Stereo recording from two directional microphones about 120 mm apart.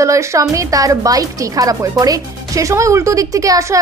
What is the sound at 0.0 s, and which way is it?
A woman's voice, 25° right (ahead or behind).